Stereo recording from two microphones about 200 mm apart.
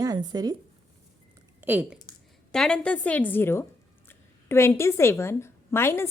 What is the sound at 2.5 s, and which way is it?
A woman's voice, 5° left (ahead or behind).